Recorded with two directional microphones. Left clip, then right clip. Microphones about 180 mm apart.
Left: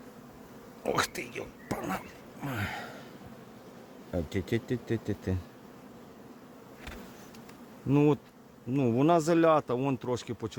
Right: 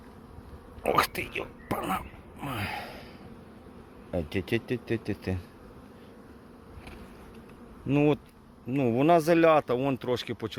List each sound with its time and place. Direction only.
0.8 s a sound: 5° right (ahead or behind)
4.1 s speech: centre (ahead or behind)
7.9 s bee: 10° left (ahead or behind)
8.7 s speech: 5° left (ahead or behind)